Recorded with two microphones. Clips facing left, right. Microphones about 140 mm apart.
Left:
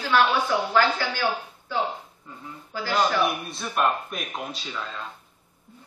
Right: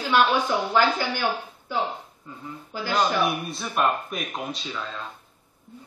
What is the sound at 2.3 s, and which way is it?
Speech, centre (ahead or behind).